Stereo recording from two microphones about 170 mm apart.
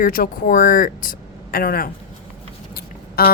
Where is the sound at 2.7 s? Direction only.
60° left (ahead or behind).